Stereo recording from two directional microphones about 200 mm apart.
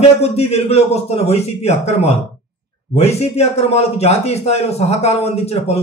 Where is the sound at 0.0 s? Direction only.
30° left (ahead or behind).